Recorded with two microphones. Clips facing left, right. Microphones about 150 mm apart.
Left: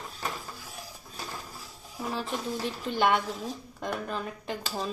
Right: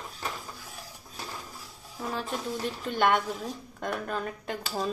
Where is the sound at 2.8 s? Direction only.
5° left (ahead or behind).